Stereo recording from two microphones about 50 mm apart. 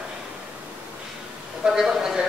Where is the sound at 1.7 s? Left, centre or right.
Centre.